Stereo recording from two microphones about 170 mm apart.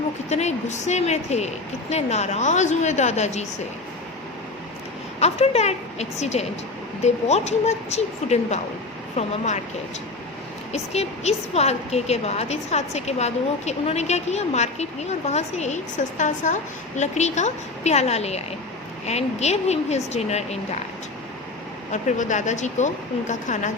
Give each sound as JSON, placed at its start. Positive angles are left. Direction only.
{"t": 0.3, "sound": "a woman's voice", "side_deg": 40}
{"t": 5.2, "sound": "a woman's voice", "side_deg": 40}
{"t": 10.7, "sound": "a woman's voice", "side_deg": 40}
{"t": 21.9, "sound": "a woman's voice", "side_deg": 45}